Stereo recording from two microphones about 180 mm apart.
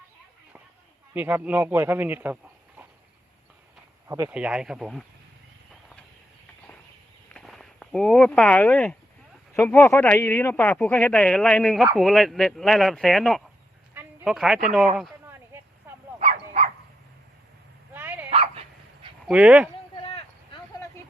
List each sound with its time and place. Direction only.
1.1 s speech: 10° right (ahead or behind)
4.1 s speech: 10° right (ahead or behind)
7.3 s speech: centre (ahead or behind)
13.9 s a sound: centre (ahead or behind)
15.3 s a sound: 15° right (ahead or behind)
16.1 s livestock: 35° right (ahead or behind)
17.9 s dog: 10° right (ahead or behind)
18.3 s dog: 35° right (ahead or behind)
19.3 s speech: 5° right (ahead or behind)
20.0 s a sound: 30° left (ahead or behind)